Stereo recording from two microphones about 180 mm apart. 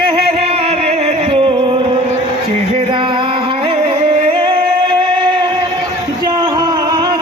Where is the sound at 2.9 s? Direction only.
25° right (ahead or behind).